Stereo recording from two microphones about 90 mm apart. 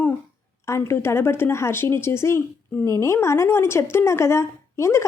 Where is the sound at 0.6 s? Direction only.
30° left (ahead or behind).